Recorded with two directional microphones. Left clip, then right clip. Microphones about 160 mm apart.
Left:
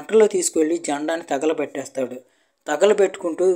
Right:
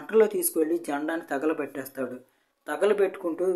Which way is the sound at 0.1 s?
30° left (ahead or behind).